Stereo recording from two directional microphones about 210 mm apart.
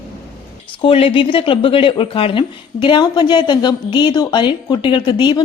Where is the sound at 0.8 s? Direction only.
25° left (ahead or behind).